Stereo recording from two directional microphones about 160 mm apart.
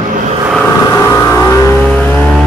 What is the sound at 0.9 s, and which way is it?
Vehicle, 20° left (ahead or behind).